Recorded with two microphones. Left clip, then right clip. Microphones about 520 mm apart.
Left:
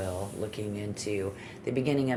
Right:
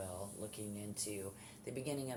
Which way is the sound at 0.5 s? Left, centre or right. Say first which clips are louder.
Left 12 dB; right.